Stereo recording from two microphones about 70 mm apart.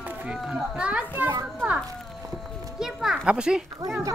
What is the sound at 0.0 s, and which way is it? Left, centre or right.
Run, right.